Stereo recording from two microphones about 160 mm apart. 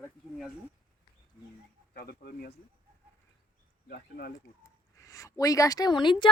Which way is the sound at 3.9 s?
75° left (ahead or behind).